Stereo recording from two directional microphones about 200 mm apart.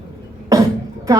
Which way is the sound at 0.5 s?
15° right (ahead or behind).